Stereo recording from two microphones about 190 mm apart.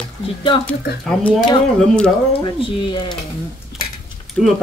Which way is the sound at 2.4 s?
25° left (ahead or behind).